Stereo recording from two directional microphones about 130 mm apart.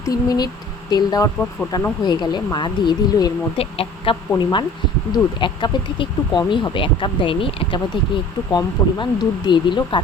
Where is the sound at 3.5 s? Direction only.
45° left (ahead or behind).